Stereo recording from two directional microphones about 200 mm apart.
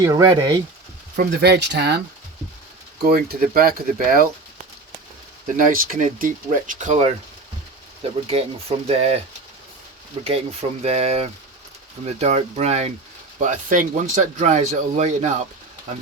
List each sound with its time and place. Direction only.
0.0 s speech: 20° right (ahead or behind)
1.1 s speech: 50° right (ahead or behind)
3.0 s speech: 50° right (ahead or behind); by 9.2 s 30° right (ahead or behind)
10.2 s speech: 30° right (ahead or behind)